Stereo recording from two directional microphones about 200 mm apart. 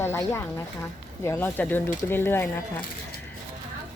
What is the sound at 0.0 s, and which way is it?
A woman's voice, 10° left (ahead or behind).